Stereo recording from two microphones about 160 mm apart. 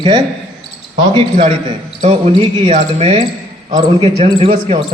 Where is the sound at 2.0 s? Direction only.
35° right (ahead or behind).